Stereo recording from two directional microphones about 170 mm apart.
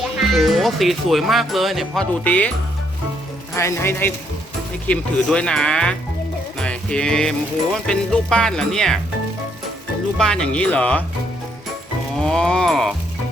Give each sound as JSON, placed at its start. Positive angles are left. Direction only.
{"t": 0.2, "sound": "music", "side_deg": 0}
{"t": 3.5, "sound": "speech", "side_deg": 15}
{"t": 4.9, "sound": "music", "side_deg": 5}
{"t": 10.2, "sound": "speech", "side_deg": 5}
{"t": 12.2, "sound": "music", "side_deg": 5}